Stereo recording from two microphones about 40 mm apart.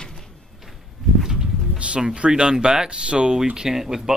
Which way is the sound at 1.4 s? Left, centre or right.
Right.